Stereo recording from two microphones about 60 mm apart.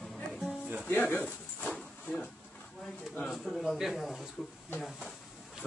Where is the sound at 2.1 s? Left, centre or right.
Left.